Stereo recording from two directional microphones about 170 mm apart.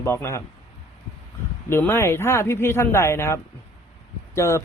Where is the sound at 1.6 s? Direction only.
15° left (ahead or behind).